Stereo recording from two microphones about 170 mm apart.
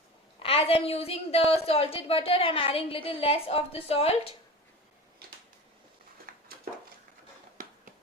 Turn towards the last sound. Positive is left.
turn(degrees=-55)  # may be behind; listen again after turning